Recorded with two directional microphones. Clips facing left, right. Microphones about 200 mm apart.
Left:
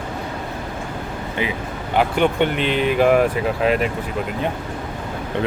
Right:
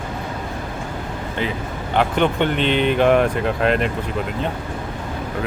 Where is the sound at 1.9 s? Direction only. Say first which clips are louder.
Left 1 dB; 5° left (ahead or behind).